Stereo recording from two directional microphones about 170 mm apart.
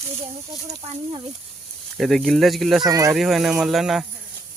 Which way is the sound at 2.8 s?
20° right (ahead or behind).